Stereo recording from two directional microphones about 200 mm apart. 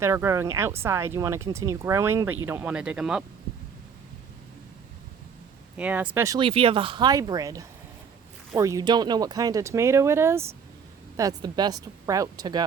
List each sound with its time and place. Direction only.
0.0 s speech: 15° right (ahead or behind)
5.7 s speech: 5° right (ahead or behind)